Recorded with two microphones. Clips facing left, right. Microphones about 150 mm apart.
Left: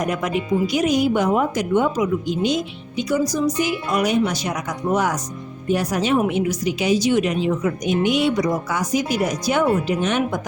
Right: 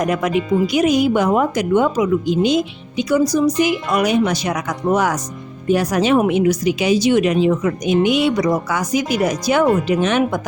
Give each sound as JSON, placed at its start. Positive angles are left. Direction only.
{"t": 0.1, "sound": "a woman's voice", "side_deg": -90}
{"t": 3.6, "sound": "a woman's voice", "side_deg": -85}